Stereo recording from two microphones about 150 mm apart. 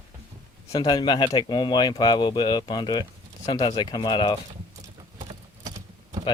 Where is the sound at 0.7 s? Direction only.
25° left (ahead or behind).